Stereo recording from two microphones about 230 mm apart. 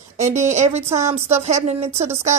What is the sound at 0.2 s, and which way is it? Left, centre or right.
Speech, right.